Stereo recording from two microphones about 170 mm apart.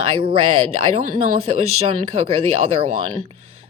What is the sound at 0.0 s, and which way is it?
Speech, 35° right (ahead or behind).